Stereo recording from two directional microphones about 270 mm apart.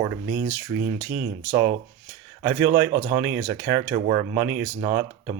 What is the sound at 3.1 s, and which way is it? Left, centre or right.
Speech, centre.